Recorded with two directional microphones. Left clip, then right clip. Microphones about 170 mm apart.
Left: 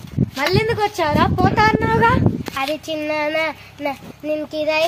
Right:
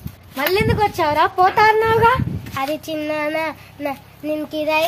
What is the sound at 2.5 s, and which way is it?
A child's voice, 10° right (ahead or behind).